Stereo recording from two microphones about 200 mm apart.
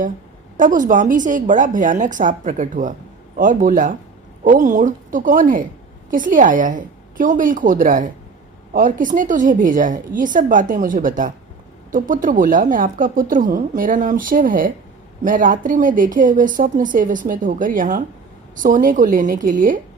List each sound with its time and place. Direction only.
0.5 s a woman's voice: 40° right (ahead or behind)